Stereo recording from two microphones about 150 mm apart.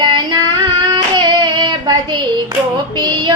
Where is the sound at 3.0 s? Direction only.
30° right (ahead or behind).